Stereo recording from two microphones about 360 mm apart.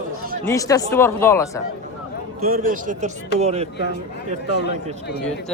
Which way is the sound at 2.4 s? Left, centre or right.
Right.